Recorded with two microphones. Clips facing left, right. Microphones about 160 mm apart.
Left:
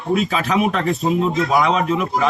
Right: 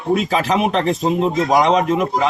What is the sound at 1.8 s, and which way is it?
Speech, 40° right (ahead or behind).